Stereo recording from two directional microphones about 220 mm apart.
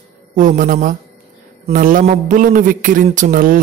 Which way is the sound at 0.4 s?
35° right (ahead or behind).